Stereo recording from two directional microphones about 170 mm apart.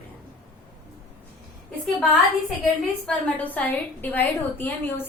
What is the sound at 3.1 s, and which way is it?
A woman's voice, 10° left (ahead or behind).